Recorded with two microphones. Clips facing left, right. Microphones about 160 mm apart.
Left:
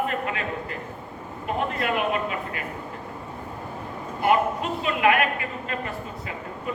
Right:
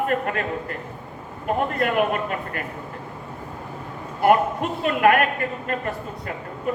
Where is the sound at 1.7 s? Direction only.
50° right (ahead or behind).